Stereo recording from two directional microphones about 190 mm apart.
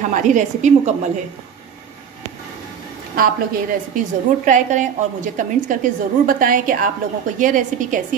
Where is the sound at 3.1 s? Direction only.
50° right (ahead or behind).